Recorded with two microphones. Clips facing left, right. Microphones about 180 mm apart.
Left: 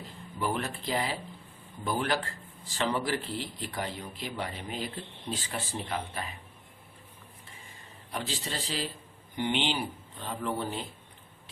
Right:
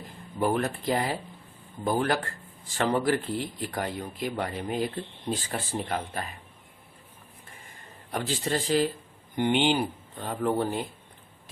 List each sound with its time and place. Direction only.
0.3 s speech: 50° right (ahead or behind)
8.1 s speech: 50° right (ahead or behind)